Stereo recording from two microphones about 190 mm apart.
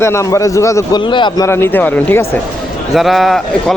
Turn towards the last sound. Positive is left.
turn(degrees=0)  # may be behind; listen again after turning